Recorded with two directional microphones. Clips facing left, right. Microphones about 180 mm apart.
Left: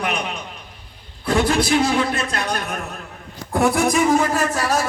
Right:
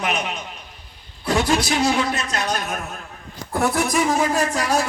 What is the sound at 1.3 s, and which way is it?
Speech, 55° left (ahead or behind).